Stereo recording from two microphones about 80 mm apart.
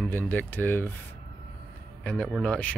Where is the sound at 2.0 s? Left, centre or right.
Centre.